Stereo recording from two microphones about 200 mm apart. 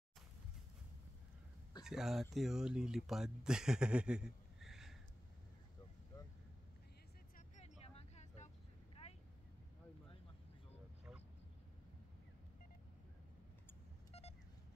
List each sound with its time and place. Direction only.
1.8 s speech: centre (ahead or behind)
7.3 s vehicle: 35° left (ahead or behind)